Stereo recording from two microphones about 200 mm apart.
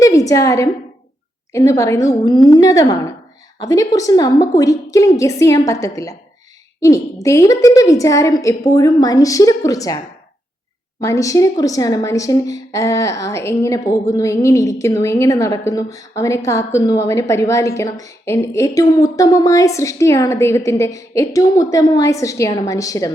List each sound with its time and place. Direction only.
0.0 s a woman's voice: 15° left (ahead or behind)
11.0 s a woman's voice: 15° left (ahead or behind)